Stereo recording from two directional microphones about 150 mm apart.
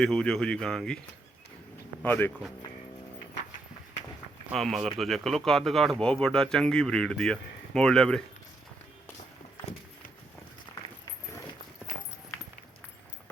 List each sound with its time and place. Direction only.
0.0 s speech: 5° left (ahead or behind)
2.0 s speech: 10° left (ahead or behind)
4.5 s speech: centre (ahead or behind)
10.7 s walk: 20° left (ahead or behind)